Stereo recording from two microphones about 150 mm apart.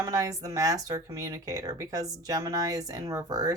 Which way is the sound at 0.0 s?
25° right (ahead or behind).